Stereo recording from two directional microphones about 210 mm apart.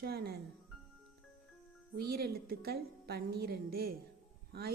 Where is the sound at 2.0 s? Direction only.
45° right (ahead or behind).